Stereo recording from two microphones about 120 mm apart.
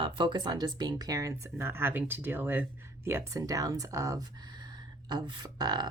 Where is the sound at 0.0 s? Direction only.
40° right (ahead or behind).